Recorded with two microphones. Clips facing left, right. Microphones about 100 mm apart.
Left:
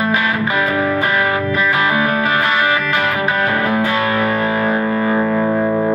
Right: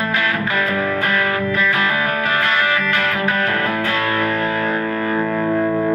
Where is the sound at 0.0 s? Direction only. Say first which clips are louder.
Left 3 dB; 15° left (ahead or behind).